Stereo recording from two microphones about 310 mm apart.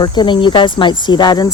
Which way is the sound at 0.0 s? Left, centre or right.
Centre.